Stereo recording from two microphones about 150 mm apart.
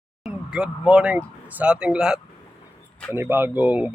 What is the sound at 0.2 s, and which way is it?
Speech, 5° right (ahead or behind).